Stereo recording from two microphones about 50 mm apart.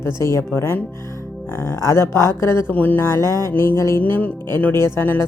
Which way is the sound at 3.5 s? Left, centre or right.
Left.